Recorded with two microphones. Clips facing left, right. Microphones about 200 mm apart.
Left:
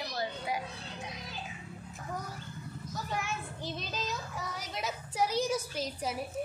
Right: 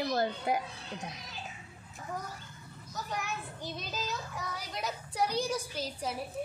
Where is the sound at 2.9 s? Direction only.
Centre (ahead or behind).